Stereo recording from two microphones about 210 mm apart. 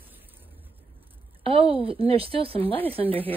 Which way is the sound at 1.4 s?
25° right (ahead or behind).